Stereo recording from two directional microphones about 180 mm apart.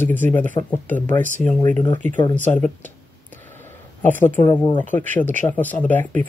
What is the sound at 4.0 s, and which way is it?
A woman's voice, 10° left (ahead or behind).